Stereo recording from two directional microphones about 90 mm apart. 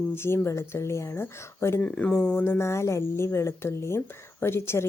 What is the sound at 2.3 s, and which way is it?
Speech, 25° left (ahead or behind).